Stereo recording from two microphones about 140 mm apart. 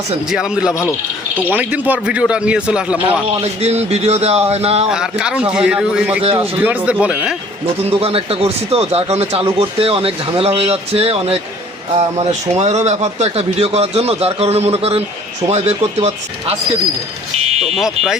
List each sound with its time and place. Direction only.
0.3 s speech: 5° right (ahead or behind)
0.7 s speech: 20° left (ahead or behind)
1.4 s speech: 10° right (ahead or behind)
3.4 s speech: 50° right (ahead or behind)
4.9 s speech: 5° right (ahead or behind)
6.2 s speech: 45° right (ahead or behind)
6.6 s speech: 10° right (ahead or behind)
7.9 s speech: 45° right (ahead or behind)
17.7 s speech: centre (ahead or behind)